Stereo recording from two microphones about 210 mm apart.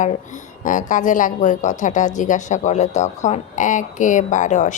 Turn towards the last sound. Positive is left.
turn(degrees=35)  # may be behind; listen again after turning